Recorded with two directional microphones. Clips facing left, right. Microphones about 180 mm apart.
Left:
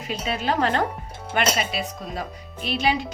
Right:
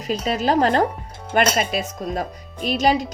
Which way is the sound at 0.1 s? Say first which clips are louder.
Right 6 dB; 40° right (ahead or behind).